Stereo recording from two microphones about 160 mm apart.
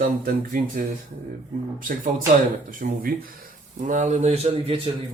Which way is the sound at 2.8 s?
65° right (ahead or behind).